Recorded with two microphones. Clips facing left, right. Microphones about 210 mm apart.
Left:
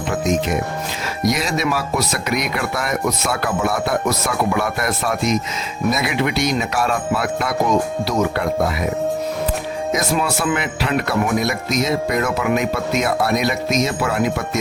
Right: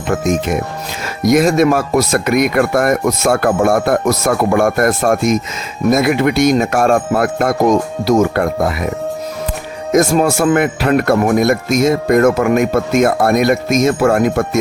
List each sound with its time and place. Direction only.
0.1 s speech: 50° right (ahead or behind)
9.9 s speech: 45° right (ahead or behind)